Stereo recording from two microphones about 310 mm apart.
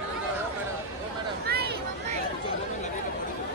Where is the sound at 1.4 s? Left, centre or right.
Right.